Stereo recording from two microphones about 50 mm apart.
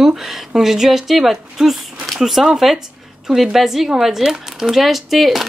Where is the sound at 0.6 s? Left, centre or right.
Centre.